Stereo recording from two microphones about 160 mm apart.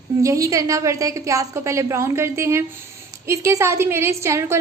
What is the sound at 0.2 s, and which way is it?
A woman's voice, 20° right (ahead or behind).